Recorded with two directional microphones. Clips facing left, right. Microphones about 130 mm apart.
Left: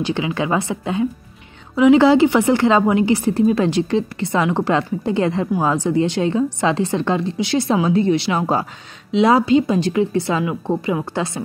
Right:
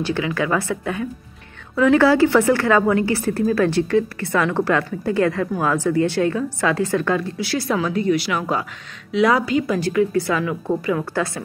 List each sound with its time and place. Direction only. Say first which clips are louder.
0.0 s a woman's voice: left 1 dB; 20° left (ahead or behind)